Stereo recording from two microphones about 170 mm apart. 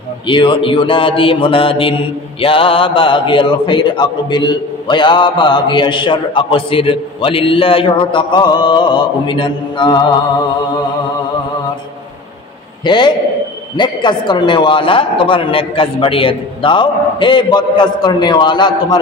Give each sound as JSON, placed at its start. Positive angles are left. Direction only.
{"t": 0.3, "sound": "a man's voice", "side_deg": 30}
{"t": 12.8, "sound": "a man's voice", "side_deg": 25}